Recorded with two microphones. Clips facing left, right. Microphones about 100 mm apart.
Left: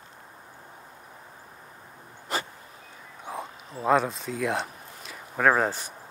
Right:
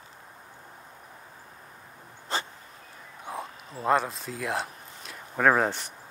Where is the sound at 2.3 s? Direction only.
30° right (ahead or behind).